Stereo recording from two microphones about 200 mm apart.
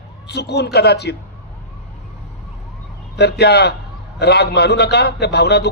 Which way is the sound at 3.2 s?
55° left (ahead or behind).